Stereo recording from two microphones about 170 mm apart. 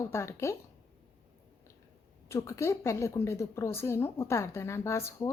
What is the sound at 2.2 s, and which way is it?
A woman's voice, 15° left (ahead or behind).